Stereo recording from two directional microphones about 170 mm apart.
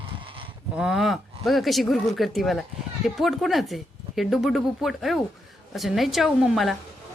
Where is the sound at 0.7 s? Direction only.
5° right (ahead or behind).